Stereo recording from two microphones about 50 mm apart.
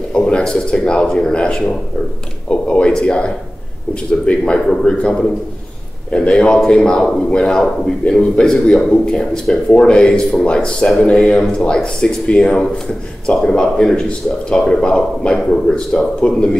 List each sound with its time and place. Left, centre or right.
0.1 s speech: centre
1.0 s a man's voice: centre
2.5 s a sound: left
3.0 s a man's voice: left